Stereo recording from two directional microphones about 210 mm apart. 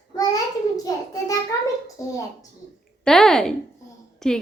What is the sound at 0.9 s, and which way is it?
A child's voice, 15° left (ahead or behind).